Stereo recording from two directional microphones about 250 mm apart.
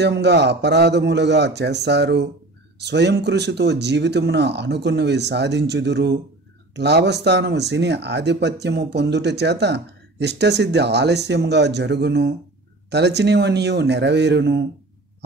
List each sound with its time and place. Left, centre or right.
0.0 s speech: right